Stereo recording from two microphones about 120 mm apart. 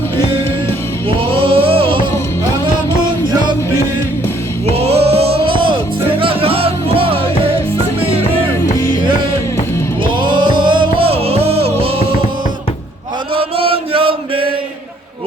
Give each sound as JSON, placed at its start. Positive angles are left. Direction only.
{"t": 1.3, "sound": "music", "side_deg": -50}
{"t": 4.7, "sound": "music", "side_deg": -55}
{"t": 10.1, "sound": "music", "side_deg": -40}
{"t": 13.3, "sound": "chant", "side_deg": -50}